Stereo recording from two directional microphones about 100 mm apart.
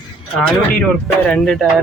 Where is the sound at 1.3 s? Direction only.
5° left (ahead or behind).